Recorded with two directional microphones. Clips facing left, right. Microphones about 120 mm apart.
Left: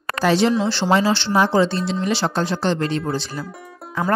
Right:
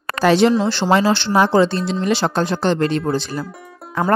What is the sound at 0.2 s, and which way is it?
A woman's voice, 60° right (ahead or behind).